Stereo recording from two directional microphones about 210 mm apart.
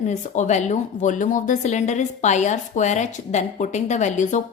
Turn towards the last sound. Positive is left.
turn(degrees=35)  # may be behind; listen again after turning